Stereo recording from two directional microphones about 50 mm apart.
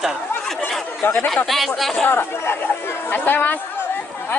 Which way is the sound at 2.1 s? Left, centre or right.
Left.